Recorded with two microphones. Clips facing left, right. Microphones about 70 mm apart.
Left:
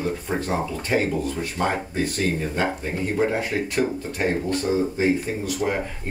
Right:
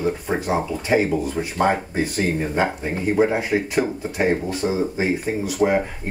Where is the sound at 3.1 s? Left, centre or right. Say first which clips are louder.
Right 4 dB; centre.